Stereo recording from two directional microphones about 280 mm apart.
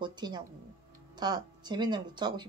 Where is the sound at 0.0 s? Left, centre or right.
Centre.